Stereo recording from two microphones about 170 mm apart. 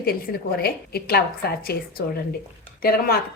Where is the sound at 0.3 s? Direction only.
60° left (ahead or behind).